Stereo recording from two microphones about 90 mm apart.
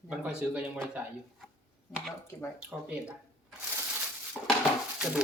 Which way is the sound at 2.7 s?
10° right (ahead or behind).